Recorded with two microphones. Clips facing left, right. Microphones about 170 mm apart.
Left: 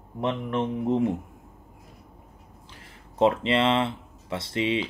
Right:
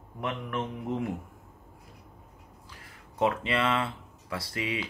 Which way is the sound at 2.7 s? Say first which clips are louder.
Left 2 dB; 25° left (ahead or behind).